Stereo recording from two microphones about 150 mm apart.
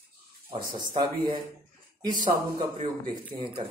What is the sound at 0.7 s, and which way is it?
A man's voice, 30° right (ahead or behind).